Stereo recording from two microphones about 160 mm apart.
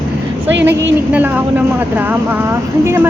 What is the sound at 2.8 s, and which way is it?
Speech, 15° right (ahead or behind).